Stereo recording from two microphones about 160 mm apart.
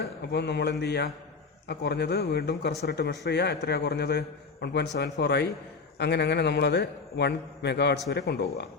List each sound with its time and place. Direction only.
0.0 s a man's voice: 90° left